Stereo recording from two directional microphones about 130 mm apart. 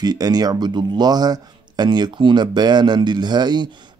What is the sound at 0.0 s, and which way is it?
Speech, 30° right (ahead or behind).